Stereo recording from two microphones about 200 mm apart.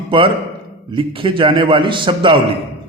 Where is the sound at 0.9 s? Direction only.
25° right (ahead or behind).